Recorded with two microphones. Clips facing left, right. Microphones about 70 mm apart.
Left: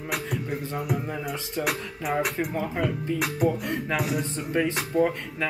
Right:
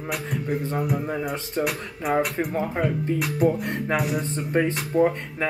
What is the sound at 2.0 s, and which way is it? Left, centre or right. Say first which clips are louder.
Speech: right 3 dB; right.